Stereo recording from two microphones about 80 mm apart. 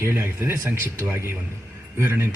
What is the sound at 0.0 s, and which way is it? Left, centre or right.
Speech, right.